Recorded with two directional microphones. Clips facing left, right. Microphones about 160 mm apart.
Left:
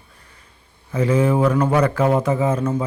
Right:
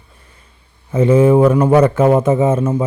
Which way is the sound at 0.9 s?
25° right (ahead or behind).